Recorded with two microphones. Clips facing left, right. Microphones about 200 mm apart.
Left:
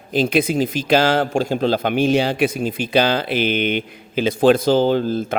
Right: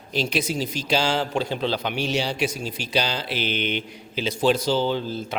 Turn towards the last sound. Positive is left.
turn(degrees=50)  # may be behind; listen again after turning